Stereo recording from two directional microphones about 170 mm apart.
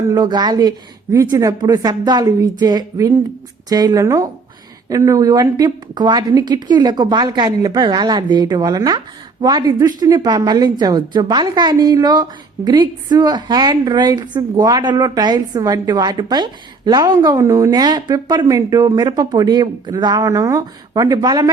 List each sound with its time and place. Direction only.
0.1 s a woman's voice: 25° right (ahead or behind)